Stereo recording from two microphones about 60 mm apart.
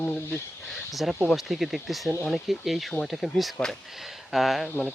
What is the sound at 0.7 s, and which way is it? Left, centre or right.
Speech, centre.